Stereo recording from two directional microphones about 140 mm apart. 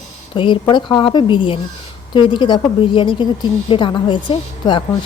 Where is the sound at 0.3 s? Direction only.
35° left (ahead or behind).